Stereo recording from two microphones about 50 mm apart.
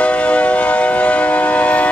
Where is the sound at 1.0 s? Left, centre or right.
Left.